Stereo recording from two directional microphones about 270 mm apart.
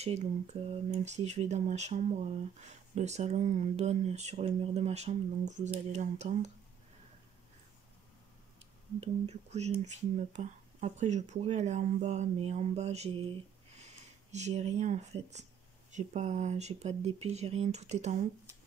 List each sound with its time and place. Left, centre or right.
0.0 s speech: right
9.0 s speech: right